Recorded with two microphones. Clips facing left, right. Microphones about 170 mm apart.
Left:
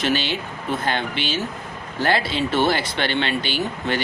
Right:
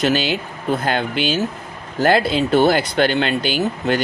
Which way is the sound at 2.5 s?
40° right (ahead or behind).